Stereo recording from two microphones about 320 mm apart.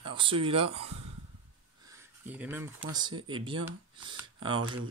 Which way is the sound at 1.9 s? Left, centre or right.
Centre.